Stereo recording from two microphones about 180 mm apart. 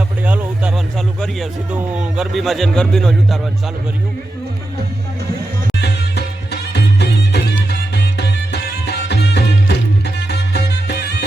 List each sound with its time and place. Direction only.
0.3 s a sound: 10° right (ahead or behind)
0.9 s a man's voice: centre (ahead or behind)
5.8 s music: 65° left (ahead or behind)